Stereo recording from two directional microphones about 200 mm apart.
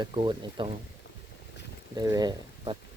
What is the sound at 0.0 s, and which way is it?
Speech, 25° right (ahead or behind).